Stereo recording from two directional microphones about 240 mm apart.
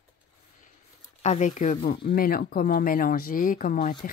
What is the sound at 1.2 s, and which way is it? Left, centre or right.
Speech, left.